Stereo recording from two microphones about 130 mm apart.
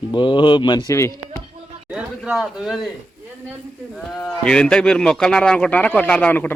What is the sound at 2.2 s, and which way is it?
Speech, centre (ahead or behind).